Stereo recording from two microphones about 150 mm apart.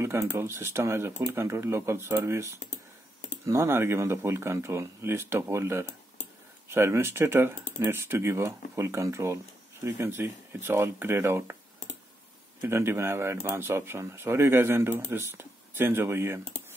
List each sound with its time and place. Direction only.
0.0 s speech: 20° right (ahead or behind)
2.6 s computer keyboard: 55° left (ahead or behind)
3.4 s speech: 15° right (ahead or behind)
12.6 s speech: 15° right (ahead or behind)